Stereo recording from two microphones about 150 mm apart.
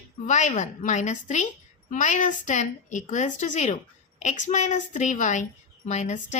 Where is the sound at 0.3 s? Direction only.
50° left (ahead or behind).